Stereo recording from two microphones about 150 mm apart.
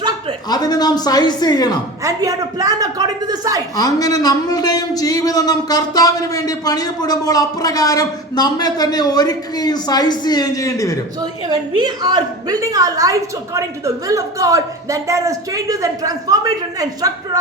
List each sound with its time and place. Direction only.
0.4 s speech: 25° left (ahead or behind)
2.0 s a woman's voice: 20° right (ahead or behind)
3.8 s speech: 25° left (ahead or behind)
11.4 s a woman's voice: 30° right (ahead or behind)